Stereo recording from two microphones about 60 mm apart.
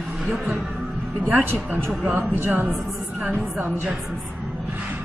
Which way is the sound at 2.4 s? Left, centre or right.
Right.